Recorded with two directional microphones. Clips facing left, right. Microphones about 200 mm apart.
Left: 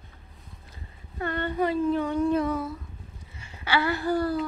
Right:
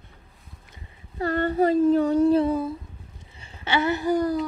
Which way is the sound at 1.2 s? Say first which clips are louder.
Right 5 dB; 40° right (ahead or behind).